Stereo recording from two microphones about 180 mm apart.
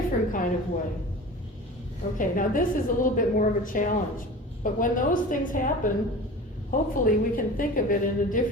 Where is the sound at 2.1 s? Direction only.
50° left (ahead or behind).